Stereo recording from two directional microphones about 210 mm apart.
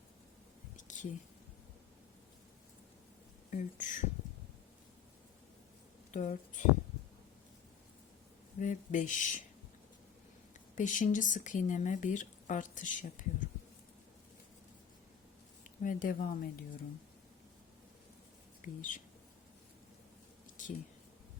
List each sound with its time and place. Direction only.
0.8 s a sound: 35° left (ahead or behind)
3.5 s speech: 35° left (ahead or behind)
6.1 s speech: 35° left (ahead or behind)
8.5 s speech: 35° left (ahead or behind)
10.8 s speech: 40° left (ahead or behind)
15.8 s speech: 40° left (ahead or behind)
18.6 s speech: 40° left (ahead or behind)
20.6 s a sound: 40° left (ahead or behind)